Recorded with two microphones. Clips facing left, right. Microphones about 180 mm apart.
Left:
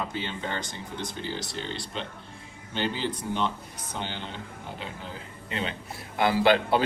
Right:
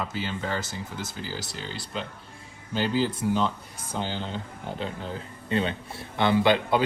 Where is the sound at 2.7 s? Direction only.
40° right (ahead or behind).